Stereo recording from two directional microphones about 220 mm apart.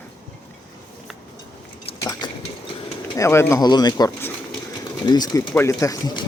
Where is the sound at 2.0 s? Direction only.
15° left (ahead or behind).